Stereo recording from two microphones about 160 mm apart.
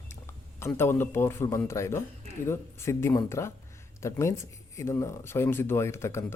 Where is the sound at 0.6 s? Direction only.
15° left (ahead or behind).